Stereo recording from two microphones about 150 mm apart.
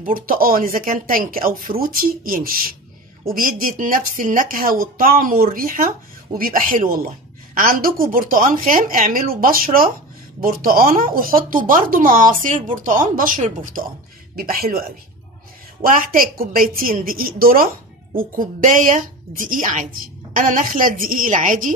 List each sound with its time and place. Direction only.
0.0 s a woman's voice: 70° right (ahead or behind)
14.3 s a woman's voice: 75° right (ahead or behind)
15.8 s a woman's voice: 70° right (ahead or behind)
18.4 s a woman's voice: 60° right (ahead or behind)